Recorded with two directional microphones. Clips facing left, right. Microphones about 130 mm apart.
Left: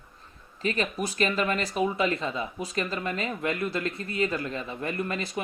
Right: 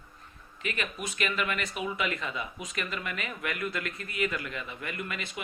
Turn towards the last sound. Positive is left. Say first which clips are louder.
# left 7 dB
turn(degrees=35)  # may be behind; listen again after turning